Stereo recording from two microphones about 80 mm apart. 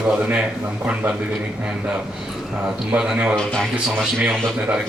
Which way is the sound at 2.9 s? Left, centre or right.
Centre.